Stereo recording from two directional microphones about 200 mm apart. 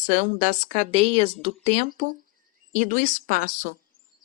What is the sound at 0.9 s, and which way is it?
Speech, 30° right (ahead or behind).